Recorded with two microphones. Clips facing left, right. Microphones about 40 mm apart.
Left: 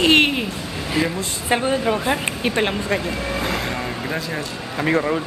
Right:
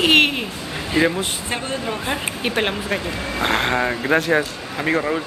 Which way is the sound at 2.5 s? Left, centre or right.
Centre.